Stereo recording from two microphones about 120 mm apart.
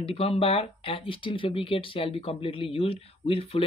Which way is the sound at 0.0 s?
55° left (ahead or behind).